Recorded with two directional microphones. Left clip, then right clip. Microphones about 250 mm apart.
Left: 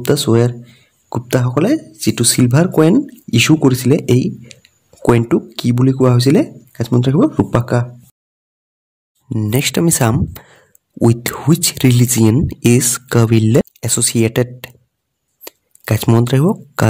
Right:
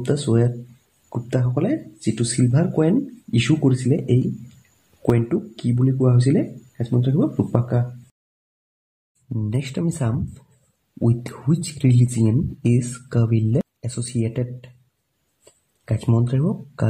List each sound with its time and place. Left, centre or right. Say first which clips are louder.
0.0 s speech: left 8 dB; left
9.3 s speech: left 12 dB; left
15.4 s a sound: left 11 dB; left